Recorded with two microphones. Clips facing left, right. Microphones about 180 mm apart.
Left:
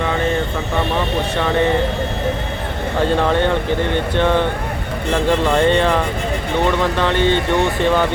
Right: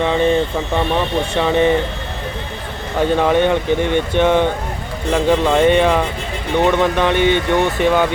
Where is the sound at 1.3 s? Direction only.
20° right (ahead or behind).